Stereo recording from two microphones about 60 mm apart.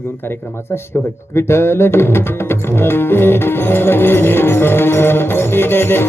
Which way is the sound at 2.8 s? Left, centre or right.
Left.